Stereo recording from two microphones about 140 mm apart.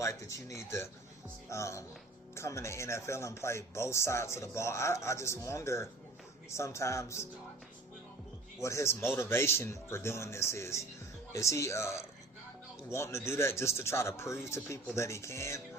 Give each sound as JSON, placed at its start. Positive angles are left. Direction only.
{"t": 0.0, "sound": "speech", "side_deg": 20}
{"t": 8.6, "sound": "speech", "side_deg": 20}